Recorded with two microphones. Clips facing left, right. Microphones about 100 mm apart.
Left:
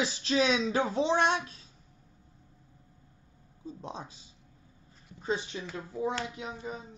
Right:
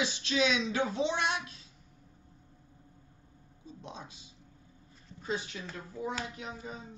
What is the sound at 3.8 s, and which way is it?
Speech, 40° left (ahead or behind).